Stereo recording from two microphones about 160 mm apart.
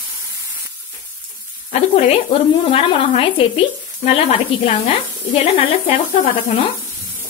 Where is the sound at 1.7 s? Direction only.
50° left (ahead or behind).